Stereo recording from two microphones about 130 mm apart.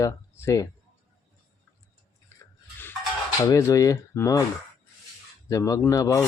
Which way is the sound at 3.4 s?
25° left (ahead or behind).